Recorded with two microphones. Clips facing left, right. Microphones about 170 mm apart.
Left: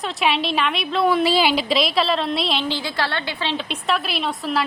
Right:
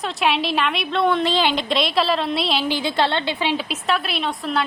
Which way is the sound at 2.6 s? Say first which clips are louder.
Right 4 dB; 15° right (ahead or behind).